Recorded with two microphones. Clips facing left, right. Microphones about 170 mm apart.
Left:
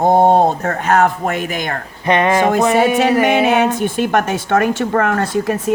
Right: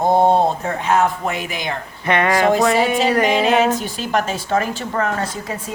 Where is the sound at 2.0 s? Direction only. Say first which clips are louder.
Left 2 dB; 20° left (ahead or behind).